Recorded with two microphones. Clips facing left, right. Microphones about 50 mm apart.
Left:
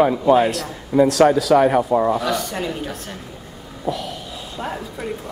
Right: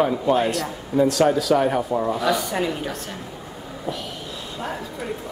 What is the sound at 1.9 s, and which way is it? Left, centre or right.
Speech, centre.